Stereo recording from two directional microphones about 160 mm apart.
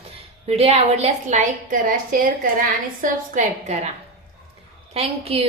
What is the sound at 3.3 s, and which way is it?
Speech, 45° right (ahead or behind).